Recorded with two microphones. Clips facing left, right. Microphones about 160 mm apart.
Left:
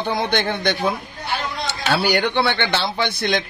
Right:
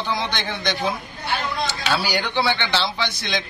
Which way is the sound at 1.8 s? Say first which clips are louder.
Left 7 dB; 60° left (ahead or behind).